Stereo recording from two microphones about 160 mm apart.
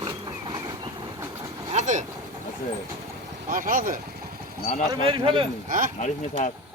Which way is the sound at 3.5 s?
55° right (ahead or behind).